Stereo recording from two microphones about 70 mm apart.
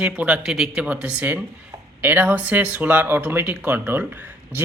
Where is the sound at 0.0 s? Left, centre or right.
Right.